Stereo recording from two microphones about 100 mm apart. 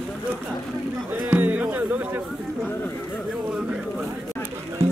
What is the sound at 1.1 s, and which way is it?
Music, 15° right (ahead or behind).